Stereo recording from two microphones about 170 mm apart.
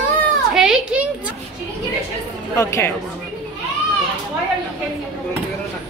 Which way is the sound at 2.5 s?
15° left (ahead or behind).